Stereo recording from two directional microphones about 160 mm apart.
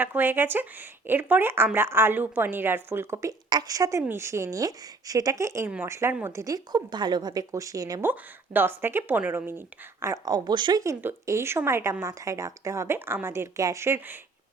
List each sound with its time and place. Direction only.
0.0 s speech: 15° right (ahead or behind)